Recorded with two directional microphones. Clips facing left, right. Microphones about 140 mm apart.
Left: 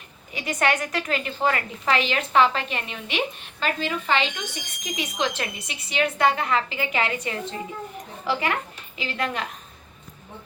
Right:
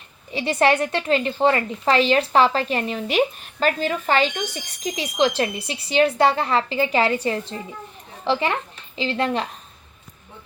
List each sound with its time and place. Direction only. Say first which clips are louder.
0.3 s a woman's voice: right 5 dB; 30° right (ahead or behind)